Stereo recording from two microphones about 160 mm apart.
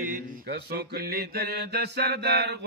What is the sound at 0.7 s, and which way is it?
Mantra, 80° right.